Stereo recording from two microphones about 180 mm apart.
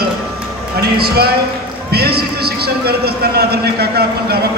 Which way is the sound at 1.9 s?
60° right (ahead or behind).